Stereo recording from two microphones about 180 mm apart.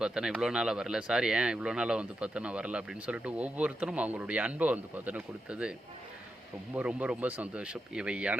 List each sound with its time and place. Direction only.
0.0 s speech: 5° right (ahead or behind)
6.7 s speech: 5° right (ahead or behind)